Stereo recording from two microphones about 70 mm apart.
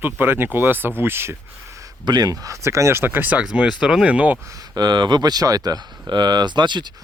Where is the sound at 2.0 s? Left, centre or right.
Right; by 4.3 s centre.